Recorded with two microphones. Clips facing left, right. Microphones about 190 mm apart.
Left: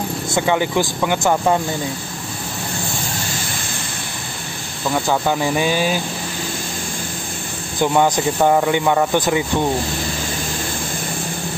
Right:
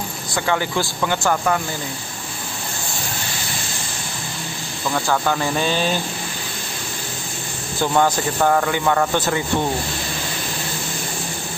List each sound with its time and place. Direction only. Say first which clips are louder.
0.3 s speech: left 3 dB; 15° left (ahead or behind)
4.9 s speech: left 2 dB; 15° left (ahead or behind)
7.8 s speech: left 2 dB; 15° left (ahead or behind)